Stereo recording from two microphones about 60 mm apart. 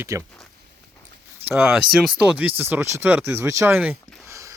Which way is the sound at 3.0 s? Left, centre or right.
Right.